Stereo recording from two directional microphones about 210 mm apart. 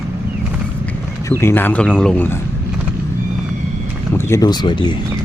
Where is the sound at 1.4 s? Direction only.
10° left (ahead or behind).